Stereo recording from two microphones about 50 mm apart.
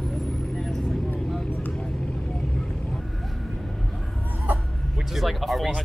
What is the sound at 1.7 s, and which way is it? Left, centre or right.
Vehicle, centre.